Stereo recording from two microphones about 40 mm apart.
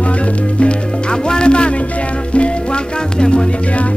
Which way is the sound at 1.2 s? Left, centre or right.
Left.